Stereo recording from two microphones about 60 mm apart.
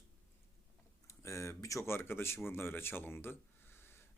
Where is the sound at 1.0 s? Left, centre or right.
Left.